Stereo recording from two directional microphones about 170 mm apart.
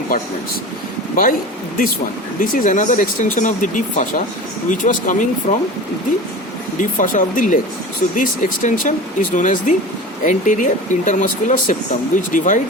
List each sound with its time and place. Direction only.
1.1 s speech: 55° left (ahead or behind)
2.4 s speech: 50° left (ahead or behind)
6.7 s speech: 50° left (ahead or behind)